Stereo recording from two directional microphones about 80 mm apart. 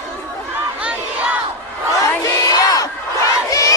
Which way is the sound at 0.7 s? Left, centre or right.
Centre.